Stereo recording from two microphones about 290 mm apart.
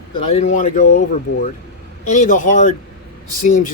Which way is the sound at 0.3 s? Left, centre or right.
Left.